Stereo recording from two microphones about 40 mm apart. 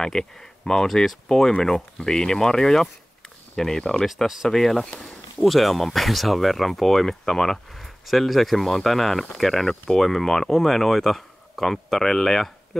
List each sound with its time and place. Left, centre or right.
0.0 s speech: centre